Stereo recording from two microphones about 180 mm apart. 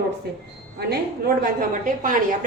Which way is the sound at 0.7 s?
55° right (ahead or behind).